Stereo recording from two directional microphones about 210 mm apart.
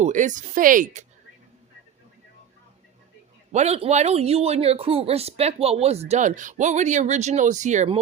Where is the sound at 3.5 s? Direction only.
30° right (ahead or behind).